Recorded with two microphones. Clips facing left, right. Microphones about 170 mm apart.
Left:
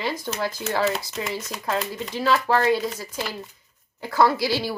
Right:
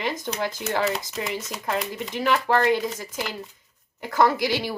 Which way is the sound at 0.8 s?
Centre (ahead or behind).